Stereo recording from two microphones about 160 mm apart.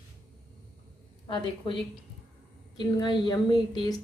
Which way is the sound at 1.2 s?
30° left (ahead or behind).